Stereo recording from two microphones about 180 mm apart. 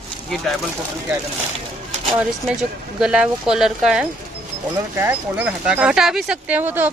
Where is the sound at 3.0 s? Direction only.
5° right (ahead or behind).